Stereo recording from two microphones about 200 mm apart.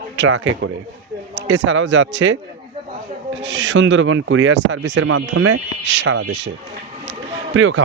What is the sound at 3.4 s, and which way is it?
Speech, 65° right (ahead or behind).